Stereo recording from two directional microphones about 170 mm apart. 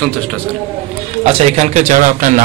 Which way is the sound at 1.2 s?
40° right (ahead or behind).